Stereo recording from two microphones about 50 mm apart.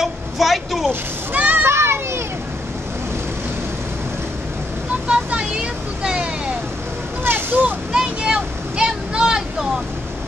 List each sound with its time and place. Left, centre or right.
0.0 s a sound: centre
1.3 s children playing: right
1.6 s children playing: right
5.0 s vehicle: right
7.2 s vehicle: right
7.9 s vehicle: centre